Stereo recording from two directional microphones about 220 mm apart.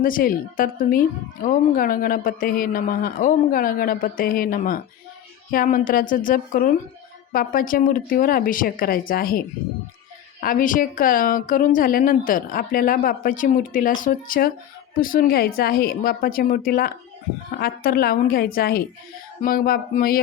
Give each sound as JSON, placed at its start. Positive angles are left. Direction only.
{"t": 0.0, "sound": "a woman's voice", "side_deg": 40}
{"t": 10.4, "sound": "a woman's voice", "side_deg": 40}